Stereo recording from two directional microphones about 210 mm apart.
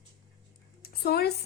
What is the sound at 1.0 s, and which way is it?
Speech, 50° left (ahead or behind).